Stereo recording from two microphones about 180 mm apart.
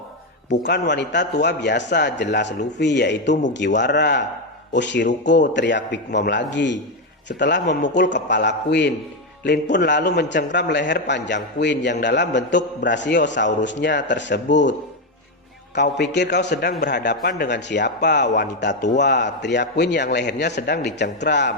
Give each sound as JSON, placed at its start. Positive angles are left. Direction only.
{"t": 0.6, "sound": "a man's voice", "side_deg": 75}